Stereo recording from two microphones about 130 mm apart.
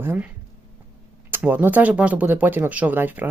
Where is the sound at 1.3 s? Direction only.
15° right (ahead or behind).